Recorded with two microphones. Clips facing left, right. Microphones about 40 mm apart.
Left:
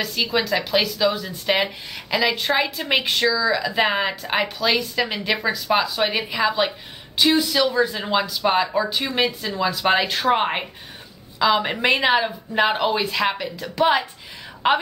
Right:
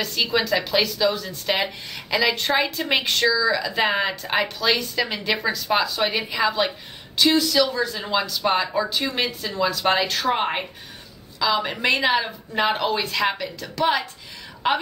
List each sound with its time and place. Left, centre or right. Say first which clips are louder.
0.0 s speech: even; centre
7.2 s speech: even; centre
8.2 s speech: left 2 dB; centre